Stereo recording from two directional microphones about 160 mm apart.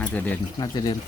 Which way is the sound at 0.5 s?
25° left (ahead or behind).